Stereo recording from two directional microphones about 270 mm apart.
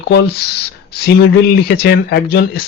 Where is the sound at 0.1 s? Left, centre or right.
Left.